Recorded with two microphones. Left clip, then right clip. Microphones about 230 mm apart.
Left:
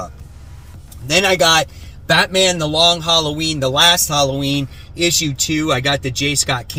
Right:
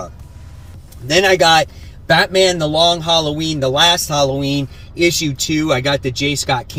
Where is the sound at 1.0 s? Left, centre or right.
Centre.